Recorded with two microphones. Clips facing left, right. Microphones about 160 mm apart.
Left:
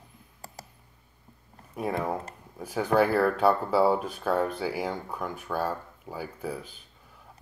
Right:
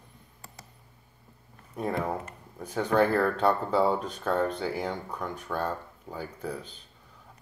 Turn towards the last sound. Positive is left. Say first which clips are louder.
# left 1 dB
turn(degrees=5)  # may be behind; listen again after turning